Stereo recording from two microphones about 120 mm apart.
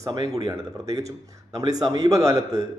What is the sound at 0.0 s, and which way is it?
Speech, 30° right (ahead or behind).